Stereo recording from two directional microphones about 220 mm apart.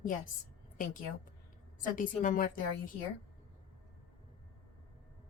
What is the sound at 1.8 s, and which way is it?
A woman's voice, 35° left (ahead or behind).